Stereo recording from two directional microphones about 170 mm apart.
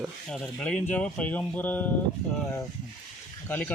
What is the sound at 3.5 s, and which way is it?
Speech, 10° left (ahead or behind).